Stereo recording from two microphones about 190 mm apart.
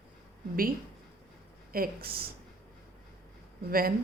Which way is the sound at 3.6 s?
50° right (ahead or behind).